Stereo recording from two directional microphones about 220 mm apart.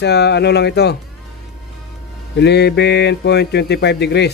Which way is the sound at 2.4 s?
50° left (ahead or behind).